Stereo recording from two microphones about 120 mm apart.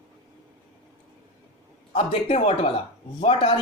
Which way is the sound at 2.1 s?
60° left (ahead or behind).